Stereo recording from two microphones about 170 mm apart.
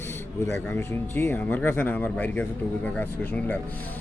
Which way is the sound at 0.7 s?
15° left (ahead or behind).